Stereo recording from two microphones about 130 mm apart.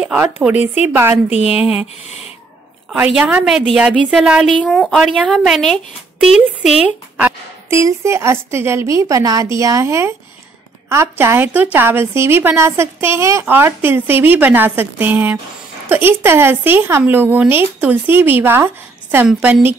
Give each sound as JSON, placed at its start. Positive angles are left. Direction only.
{"t": 0.0, "sound": "a woman's voice", "side_deg": -10}
{"t": 1.4, "sound": "a woman's voice", "side_deg": -5}
{"t": 2.0, "sound": "speech", "side_deg": 55}
{"t": 3.1, "sound": "a woman's voice", "side_deg": -10}